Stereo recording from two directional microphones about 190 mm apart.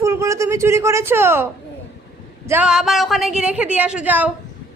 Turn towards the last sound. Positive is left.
turn(degrees=-10)  # may be behind; listen again after turning